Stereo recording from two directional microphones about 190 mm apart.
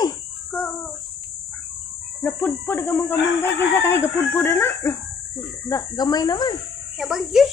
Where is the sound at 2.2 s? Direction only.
10° left (ahead or behind).